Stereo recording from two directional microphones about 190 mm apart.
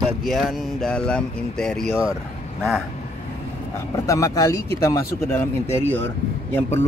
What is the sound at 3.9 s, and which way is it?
Speech, 15° left (ahead or behind).